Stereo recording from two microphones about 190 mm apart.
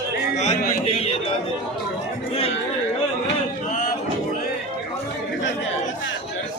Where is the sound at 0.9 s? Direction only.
30° left (ahead or behind).